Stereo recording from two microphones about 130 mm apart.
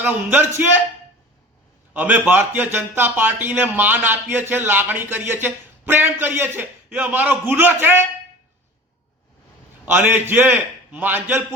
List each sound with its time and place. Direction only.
0.0 s a man's voice: 15° right (ahead or behind)
1.9 s a man's voice: 15° right (ahead or behind)
9.8 s a man's voice: 15° right (ahead or behind)